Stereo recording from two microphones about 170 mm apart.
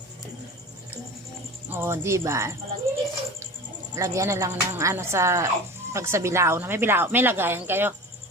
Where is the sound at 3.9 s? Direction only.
20° right (ahead or behind).